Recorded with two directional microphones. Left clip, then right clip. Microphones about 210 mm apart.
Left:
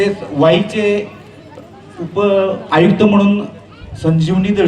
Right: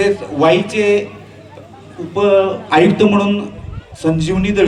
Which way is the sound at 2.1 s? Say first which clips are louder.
Right 1 dB; 25° right (ahead or behind).